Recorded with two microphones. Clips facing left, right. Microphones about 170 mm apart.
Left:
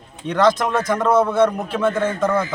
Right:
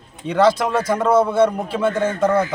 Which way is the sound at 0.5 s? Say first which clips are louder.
Right 1 dB; 30° right (ahead or behind).